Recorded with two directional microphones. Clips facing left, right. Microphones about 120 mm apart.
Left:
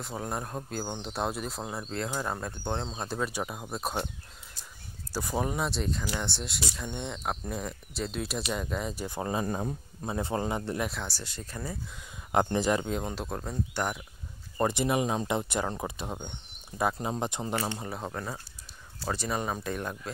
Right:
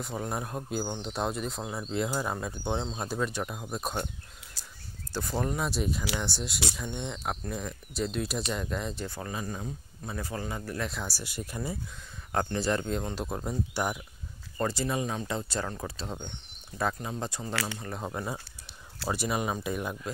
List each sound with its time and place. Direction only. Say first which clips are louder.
0.0 s speech: right 1 dB; centre (ahead or behind)
5.1 s speech: left 1 dB; 10° left (ahead or behind)
5.7 s speech: right 1 dB; 5° right (ahead or behind); by 9.2 s 10° left (ahead or behind)
9.2 s speech: left 8 dB; 30° left (ahead or behind)
10.9 s speech: even; 5° right (ahead or behind)
12.5 s speech: left 2 dB; 15° left (ahead or behind)
12.8 s speech: even; 5° left (ahead or behind)
14.6 s speech: left 3 dB; 20° left (ahead or behind)
17.8 s speech: even; centre (ahead or behind)
18.1 s speech: right 2 dB; 10° right (ahead or behind)